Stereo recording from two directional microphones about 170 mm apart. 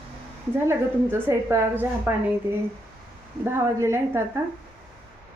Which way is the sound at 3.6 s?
15° right (ahead or behind).